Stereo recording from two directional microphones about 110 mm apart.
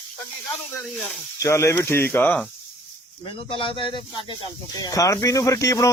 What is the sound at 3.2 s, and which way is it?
Speech, 55° left (ahead or behind).